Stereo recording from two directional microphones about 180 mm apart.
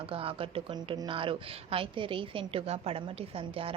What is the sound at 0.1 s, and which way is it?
A woman's voice, 30° right (ahead or behind).